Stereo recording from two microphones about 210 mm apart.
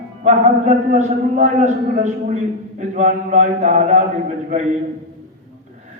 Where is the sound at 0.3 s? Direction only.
35° right (ahead or behind).